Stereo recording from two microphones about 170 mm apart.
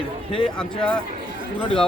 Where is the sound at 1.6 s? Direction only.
30° left (ahead or behind).